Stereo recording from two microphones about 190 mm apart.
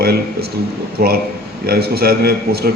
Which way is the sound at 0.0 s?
55° right (ahead or behind).